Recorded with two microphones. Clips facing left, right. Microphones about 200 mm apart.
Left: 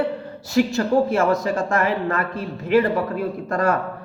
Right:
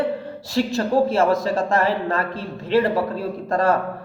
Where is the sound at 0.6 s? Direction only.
35° right (ahead or behind).